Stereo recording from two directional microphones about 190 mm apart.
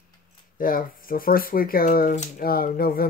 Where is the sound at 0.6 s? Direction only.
45° left (ahead or behind).